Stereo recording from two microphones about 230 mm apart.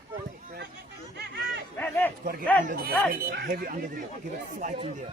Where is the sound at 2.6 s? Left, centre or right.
Right.